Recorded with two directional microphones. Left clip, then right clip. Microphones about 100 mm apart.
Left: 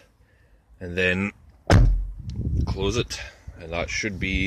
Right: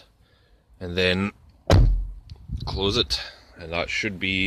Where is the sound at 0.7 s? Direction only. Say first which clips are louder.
Even; 25° right (ahead or behind).